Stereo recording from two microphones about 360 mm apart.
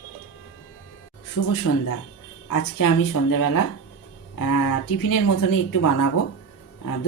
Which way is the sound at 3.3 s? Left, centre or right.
Left.